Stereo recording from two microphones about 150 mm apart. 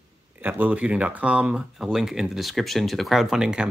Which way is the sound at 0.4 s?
10° right (ahead or behind).